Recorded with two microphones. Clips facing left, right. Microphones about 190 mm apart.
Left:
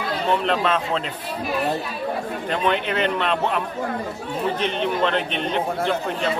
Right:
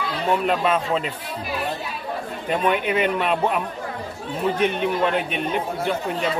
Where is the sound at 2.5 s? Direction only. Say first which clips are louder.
Right 2 dB; 10° right (ahead or behind).